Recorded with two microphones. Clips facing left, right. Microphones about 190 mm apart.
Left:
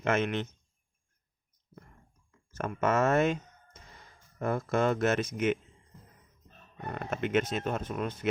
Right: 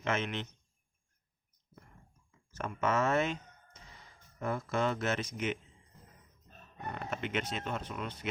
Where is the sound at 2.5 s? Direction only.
50° left (ahead or behind).